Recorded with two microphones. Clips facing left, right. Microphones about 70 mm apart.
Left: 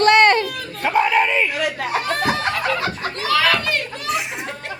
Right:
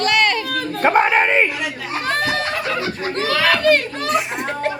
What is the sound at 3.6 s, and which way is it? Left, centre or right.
Speech, right.